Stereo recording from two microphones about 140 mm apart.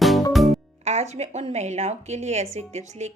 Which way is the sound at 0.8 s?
55° right (ahead or behind).